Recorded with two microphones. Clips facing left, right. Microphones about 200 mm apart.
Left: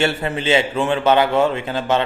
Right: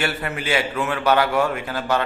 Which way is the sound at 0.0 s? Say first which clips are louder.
Left 5 dB; 25° left (ahead or behind).